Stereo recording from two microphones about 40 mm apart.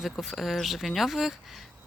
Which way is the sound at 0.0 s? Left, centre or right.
Centre.